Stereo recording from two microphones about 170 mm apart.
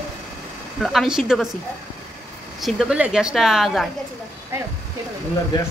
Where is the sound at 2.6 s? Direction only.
Centre (ahead or behind).